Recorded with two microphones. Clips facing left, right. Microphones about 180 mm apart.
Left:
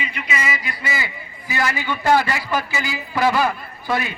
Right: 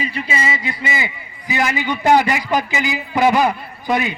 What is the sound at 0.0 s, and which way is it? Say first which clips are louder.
A man's voice: right 4 dB; 35° right (ahead or behind).